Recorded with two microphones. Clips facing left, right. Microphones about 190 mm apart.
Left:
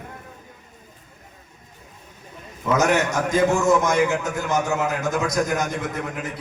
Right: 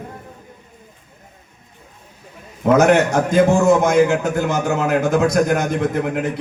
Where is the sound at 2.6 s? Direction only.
55° right (ahead or behind).